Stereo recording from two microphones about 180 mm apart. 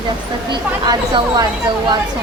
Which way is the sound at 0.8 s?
20° right (ahead or behind).